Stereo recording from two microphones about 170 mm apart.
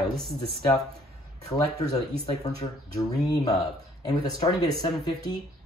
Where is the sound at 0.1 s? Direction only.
Centre (ahead or behind).